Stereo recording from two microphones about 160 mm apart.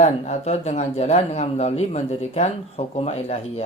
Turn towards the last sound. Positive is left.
turn(degrees=40)  # may be behind; listen again after turning